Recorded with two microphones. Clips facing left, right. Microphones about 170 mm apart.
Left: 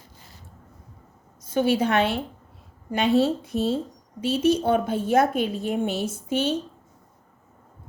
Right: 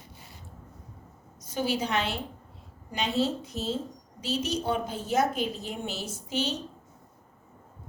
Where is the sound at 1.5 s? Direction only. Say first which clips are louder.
Left 8 dB; 55° left (ahead or behind).